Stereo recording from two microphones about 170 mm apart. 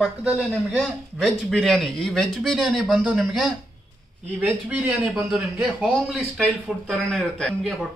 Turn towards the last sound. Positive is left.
turn(degrees=-5)  # may be behind; listen again after turning